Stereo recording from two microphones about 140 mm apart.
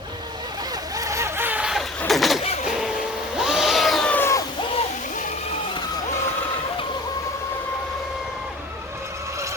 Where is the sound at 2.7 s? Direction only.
5° right (ahead or behind); by 4.4 s 20° left (ahead or behind).